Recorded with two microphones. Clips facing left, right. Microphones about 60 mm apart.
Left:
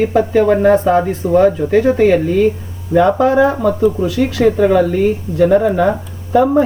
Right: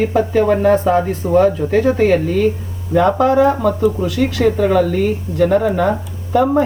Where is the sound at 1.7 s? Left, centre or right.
Left.